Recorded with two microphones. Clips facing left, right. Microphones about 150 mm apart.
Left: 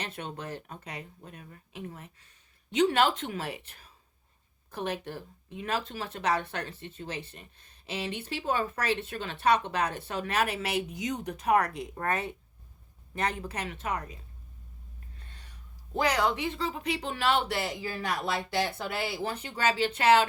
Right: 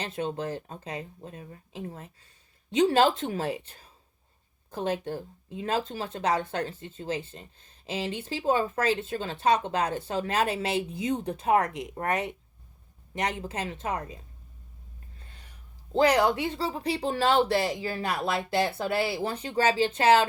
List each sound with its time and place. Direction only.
0.0 s speech: 30° right (ahead or behind)
13.4 s speech: 30° right (ahead or behind)
15.9 s speech: 30° right (ahead or behind)
17.9 s speech: 15° right (ahead or behind)
18.8 s speech: 30° right (ahead or behind)